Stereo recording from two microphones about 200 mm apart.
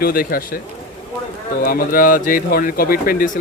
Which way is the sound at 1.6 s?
45° left (ahead or behind).